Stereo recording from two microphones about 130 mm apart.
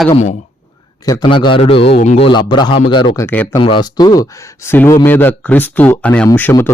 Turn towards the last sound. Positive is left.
turn(degrees=15)  # may be behind; listen again after turning